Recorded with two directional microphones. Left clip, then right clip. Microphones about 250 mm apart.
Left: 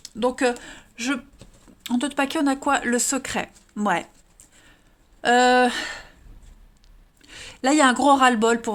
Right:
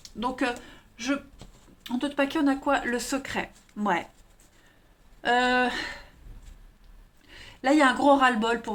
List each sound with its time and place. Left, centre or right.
0.2 s speech: left
5.2 s speech: left
7.2 s speech: left